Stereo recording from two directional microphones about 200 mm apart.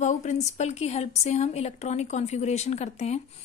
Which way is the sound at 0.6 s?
35° left (ahead or behind).